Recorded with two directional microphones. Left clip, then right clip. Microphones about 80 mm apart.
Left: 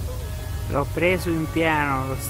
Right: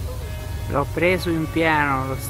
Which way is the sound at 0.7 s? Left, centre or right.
Centre.